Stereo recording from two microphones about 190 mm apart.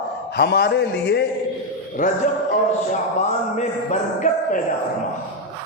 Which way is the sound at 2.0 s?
45° left (ahead or behind).